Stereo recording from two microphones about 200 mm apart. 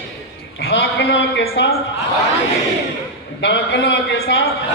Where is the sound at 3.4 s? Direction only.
65° left (ahead or behind).